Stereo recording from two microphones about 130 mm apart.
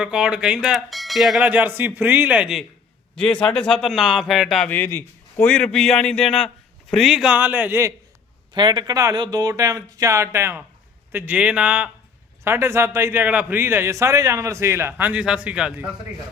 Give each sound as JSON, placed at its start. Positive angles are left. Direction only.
{"t": 0.0, "sound": "speech", "side_deg": -5}
{"t": 3.2, "sound": "a man's voice", "side_deg": 5}
{"t": 4.7, "sound": "a man's voice", "side_deg": 15}
{"t": 8.5, "sound": "a man's voice", "side_deg": -35}